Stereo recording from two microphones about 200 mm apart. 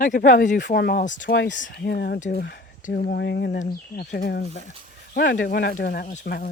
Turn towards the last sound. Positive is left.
turn(degrees=40)  # may be behind; listen again after turning